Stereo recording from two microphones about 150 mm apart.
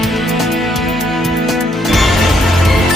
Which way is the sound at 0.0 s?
Centre (ahead or behind).